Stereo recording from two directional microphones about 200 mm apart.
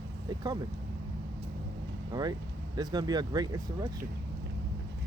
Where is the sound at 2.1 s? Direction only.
20° right (ahead or behind).